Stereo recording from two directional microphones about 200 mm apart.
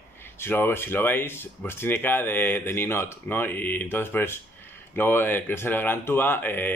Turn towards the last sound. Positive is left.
turn(degrees=10)  # may be behind; listen again after turning